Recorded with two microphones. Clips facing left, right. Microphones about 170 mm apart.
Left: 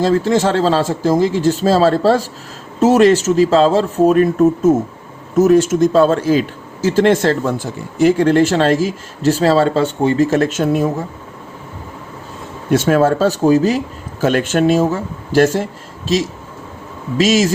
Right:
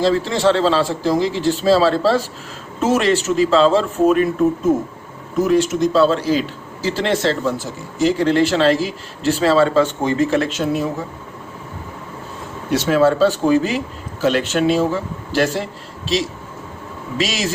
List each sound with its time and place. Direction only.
0.0 s speech: 45° left (ahead or behind)
12.7 s speech: 50° left (ahead or behind)